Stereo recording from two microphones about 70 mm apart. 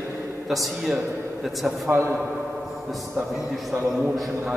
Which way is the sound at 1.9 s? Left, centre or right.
Right.